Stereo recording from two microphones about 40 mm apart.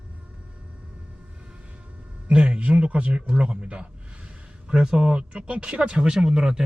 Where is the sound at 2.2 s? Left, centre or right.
Right.